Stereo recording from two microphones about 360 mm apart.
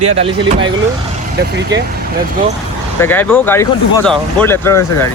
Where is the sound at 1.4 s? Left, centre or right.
Right.